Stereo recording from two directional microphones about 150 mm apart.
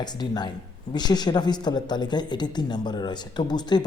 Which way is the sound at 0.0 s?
30° left (ahead or behind).